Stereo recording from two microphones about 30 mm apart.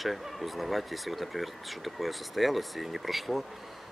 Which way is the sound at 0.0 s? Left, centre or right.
Centre.